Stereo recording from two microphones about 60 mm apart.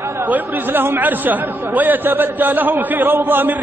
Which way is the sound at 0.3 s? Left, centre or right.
Right.